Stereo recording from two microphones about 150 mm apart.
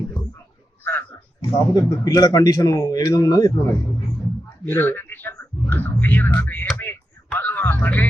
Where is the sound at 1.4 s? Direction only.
25° left (ahead or behind).